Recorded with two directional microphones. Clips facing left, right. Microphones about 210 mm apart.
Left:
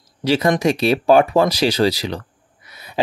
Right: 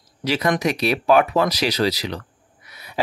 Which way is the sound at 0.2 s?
30° left (ahead or behind).